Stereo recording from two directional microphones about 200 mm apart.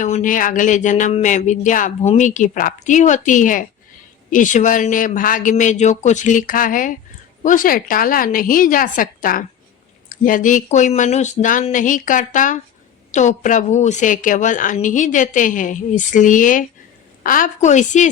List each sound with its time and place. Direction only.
0.0 s a woman's voice: 40° left (ahead or behind)